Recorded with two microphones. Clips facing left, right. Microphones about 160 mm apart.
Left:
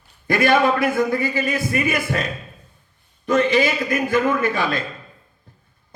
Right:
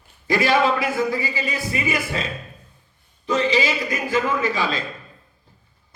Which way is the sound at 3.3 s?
55° left (ahead or behind).